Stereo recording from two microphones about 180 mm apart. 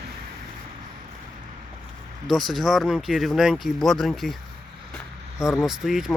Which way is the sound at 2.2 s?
Centre (ahead or behind).